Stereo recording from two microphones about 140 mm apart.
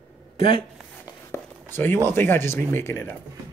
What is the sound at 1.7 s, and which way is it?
Speech, 15° left (ahead or behind).